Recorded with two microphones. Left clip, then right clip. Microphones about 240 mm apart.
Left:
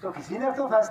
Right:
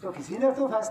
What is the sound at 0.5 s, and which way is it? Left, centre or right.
Speech, centre.